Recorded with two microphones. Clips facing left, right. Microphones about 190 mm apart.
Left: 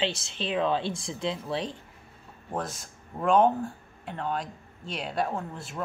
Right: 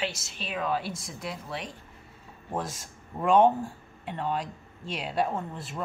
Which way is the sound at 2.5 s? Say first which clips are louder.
Even; 5° right (ahead or behind).